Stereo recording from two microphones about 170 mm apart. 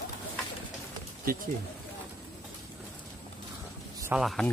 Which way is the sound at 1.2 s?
60° right (ahead or behind).